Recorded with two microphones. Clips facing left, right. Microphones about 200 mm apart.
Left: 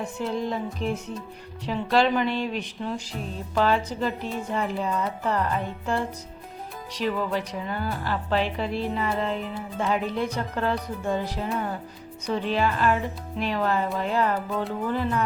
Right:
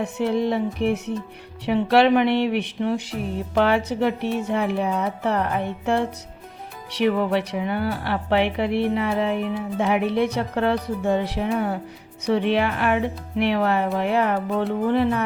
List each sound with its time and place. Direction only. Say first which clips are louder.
0.0 s speech: right 6 dB; 70° right (ahead or behind)